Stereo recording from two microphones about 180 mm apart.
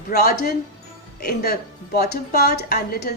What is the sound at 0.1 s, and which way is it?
A woman's voice, 60° left (ahead or behind).